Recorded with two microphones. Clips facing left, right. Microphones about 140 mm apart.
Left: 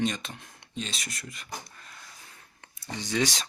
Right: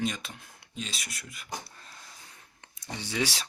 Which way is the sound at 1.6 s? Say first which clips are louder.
Even; 30° right (ahead or behind).